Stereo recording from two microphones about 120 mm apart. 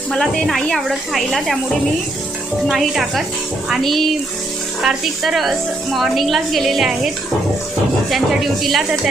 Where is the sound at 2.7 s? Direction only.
Centre (ahead or behind).